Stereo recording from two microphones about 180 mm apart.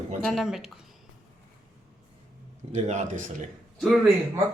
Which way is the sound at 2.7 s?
40° right (ahead or behind).